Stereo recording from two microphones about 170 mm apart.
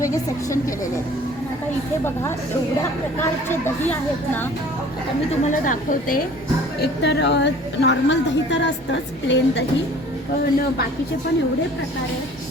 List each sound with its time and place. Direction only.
0.0 s a woman's voice: 20° left (ahead or behind)
5.3 s a woman's voice: 50° left (ahead or behind)
7.0 s a woman's voice: 85° left